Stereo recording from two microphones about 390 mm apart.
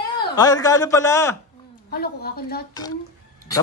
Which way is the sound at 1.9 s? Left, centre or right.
Left.